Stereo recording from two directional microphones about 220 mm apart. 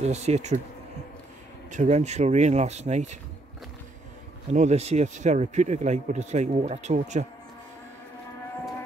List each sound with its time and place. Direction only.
0.0 s speech: 30° right (ahead or behind)
1.7 s speech: 30° right (ahead or behind)
4.5 s speech: 30° right (ahead or behind)